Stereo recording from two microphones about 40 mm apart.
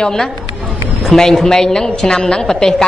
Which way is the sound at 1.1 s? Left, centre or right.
Centre.